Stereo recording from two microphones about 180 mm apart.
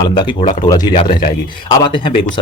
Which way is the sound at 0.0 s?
25° left (ahead or behind).